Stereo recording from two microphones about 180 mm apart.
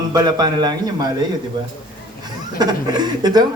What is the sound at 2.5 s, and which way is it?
Speech, 25° right (ahead or behind).